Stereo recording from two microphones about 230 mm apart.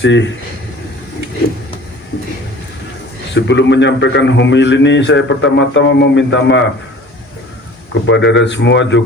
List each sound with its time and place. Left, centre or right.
0.0 s a man's voice: left
3.3 s a man's voice: left
8.0 s a man's voice: left